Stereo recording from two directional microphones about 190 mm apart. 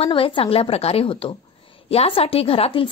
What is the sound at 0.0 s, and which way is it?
A woman's voice, 30° left (ahead or behind).